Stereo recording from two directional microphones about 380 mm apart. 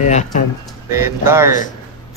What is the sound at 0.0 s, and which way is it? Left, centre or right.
Speech, centre.